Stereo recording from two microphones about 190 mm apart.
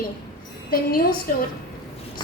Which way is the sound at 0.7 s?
50° left (ahead or behind).